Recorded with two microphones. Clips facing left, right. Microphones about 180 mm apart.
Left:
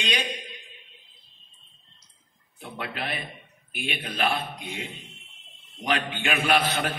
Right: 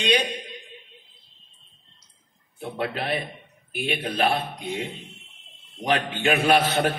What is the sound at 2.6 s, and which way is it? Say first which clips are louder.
A man's voice: right 6 dB; 30° right (ahead or behind).